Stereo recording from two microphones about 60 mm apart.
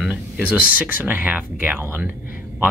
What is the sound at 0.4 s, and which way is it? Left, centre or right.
Speech, right.